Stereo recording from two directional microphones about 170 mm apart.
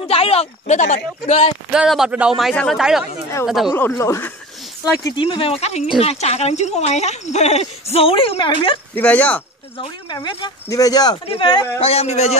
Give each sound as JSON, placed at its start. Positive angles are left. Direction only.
{"t": 0.1, "sound": "a woman's voice", "side_deg": 35}
{"t": 1.7, "sound": "speech", "side_deg": -5}
{"t": 3.7, "sound": "speech", "side_deg": 15}
{"t": 5.1, "sound": "a woman's voice", "side_deg": 30}
{"t": 8.9, "sound": "speech", "side_deg": 10}
{"t": 9.8, "sound": "a woman's voice", "side_deg": 30}